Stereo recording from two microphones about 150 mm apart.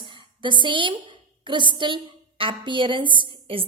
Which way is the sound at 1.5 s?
30° right (ahead or behind).